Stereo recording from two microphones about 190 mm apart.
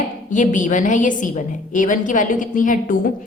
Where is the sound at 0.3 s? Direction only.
40° left (ahead or behind).